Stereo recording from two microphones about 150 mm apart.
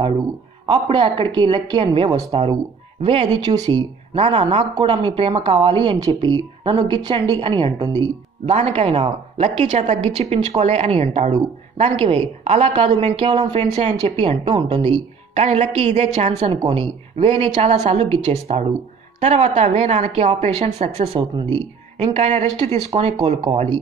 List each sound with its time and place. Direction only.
0.7 s a woman's voice: 35° right (ahead or behind)
3.4 s a woman's voice: 30° right (ahead or behind)
8.5 s a woman's voice: 45° right (ahead or behind)